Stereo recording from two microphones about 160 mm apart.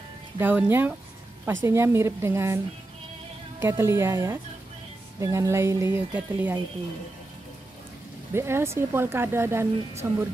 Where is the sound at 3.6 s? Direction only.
15° right (ahead or behind).